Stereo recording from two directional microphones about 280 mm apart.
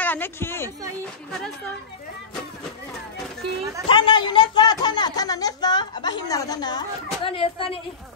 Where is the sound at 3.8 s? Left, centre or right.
Centre.